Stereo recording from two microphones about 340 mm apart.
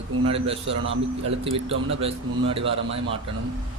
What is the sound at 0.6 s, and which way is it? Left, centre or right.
Speech, right.